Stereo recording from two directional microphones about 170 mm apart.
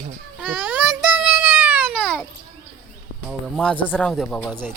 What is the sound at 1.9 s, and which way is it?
Babbling, 5° left (ahead or behind).